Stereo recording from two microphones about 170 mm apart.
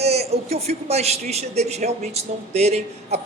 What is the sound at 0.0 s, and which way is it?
A man's voice, 40° right (ahead or behind).